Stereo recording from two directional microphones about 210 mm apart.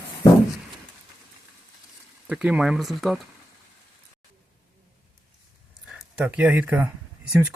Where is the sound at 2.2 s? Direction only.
5° right (ahead or behind).